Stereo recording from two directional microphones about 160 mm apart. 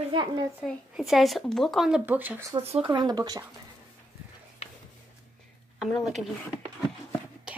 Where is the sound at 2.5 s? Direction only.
35° right (ahead or behind).